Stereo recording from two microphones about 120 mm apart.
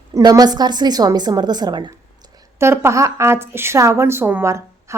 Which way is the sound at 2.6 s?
20° right (ahead or behind).